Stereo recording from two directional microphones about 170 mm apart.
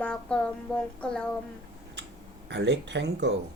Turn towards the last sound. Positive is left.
turn(degrees=-85)